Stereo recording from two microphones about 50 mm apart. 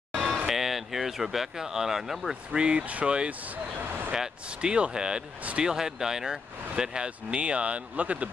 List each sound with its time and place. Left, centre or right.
0.5 s speech: centre
2.5 s speech: centre